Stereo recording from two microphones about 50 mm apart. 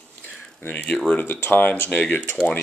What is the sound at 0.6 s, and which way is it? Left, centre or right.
Speech, left.